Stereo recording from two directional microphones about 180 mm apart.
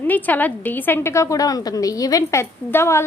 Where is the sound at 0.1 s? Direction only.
10° left (ahead or behind).